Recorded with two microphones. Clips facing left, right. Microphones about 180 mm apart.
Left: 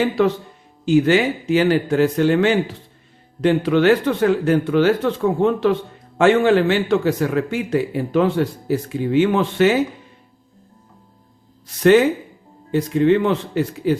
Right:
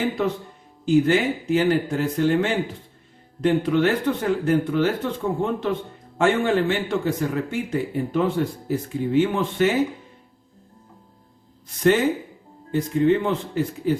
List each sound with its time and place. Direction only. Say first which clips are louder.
0.0 s a man's voice: left 6 dB; 80° left
11.8 s a man's voice: left 6 dB; 75° left (ahead or behind)